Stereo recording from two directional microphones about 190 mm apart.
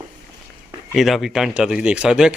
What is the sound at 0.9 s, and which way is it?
Speech, centre (ahead or behind).